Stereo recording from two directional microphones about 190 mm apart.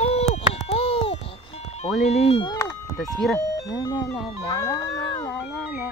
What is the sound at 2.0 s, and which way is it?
Speech, 30° left (ahead or behind).